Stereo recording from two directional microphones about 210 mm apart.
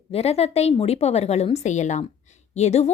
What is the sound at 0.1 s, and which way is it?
A woman's voice, 30° left (ahead or behind).